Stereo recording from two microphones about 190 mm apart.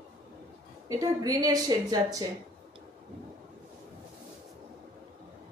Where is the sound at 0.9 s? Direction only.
20° right (ahead or behind).